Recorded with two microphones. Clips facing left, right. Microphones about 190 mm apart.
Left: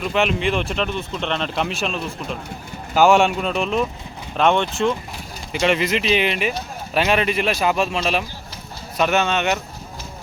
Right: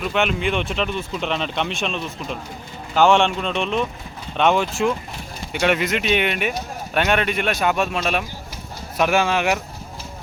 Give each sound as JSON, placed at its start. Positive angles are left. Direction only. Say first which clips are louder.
{"t": 0.0, "sound": "speech", "louder": "left 1 dB", "side_deg": 0}